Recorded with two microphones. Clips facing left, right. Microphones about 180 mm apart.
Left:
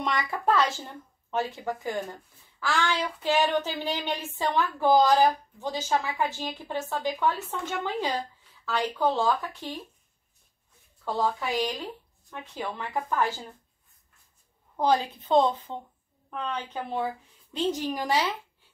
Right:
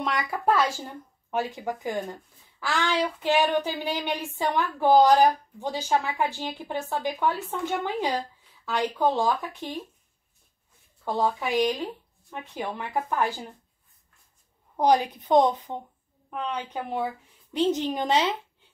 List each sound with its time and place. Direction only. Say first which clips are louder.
0.0 s speech: right 1 dB; 10° right (ahead or behind)
11.1 s speech: right 2 dB; 15° right (ahead or behind)
14.8 s a woman's voice: right 3 dB; 15° right (ahead or behind)